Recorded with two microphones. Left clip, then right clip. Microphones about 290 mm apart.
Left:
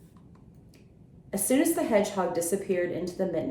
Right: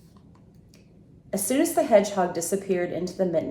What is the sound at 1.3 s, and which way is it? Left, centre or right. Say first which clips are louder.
A woman's voice: right 1 dB; right.